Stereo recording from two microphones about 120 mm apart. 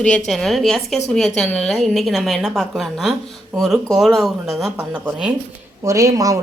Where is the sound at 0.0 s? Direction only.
5° left (ahead or behind).